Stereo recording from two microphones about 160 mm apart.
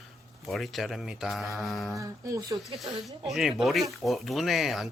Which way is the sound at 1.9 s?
20° right (ahead or behind).